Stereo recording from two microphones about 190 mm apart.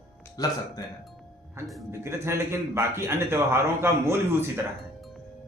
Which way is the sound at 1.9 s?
15° right (ahead or behind).